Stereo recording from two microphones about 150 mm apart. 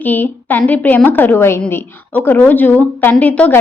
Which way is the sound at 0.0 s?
10° left (ahead or behind).